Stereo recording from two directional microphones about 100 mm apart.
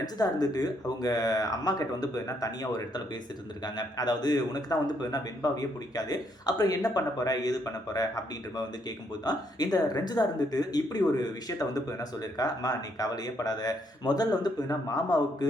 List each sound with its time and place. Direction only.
0.0 s a man's voice: 40° left (ahead or behind)